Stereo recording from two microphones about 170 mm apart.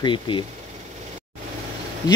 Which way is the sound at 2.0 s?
20° left (ahead or behind).